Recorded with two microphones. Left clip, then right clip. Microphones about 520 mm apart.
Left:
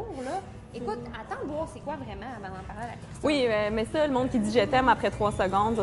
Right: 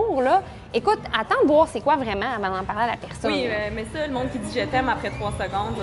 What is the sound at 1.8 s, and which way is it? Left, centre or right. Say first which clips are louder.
A woman's voice: right 15 dB; right.